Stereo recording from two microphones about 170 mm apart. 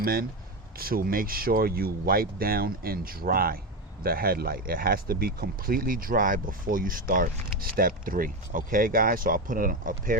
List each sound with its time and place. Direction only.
0.0 s speech: 60° right (ahead or behind)